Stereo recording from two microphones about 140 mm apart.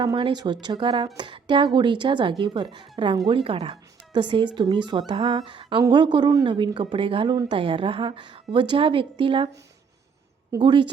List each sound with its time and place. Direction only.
0.0 s speech: 30° right (ahead or behind)
10.6 s speech: 35° right (ahead or behind)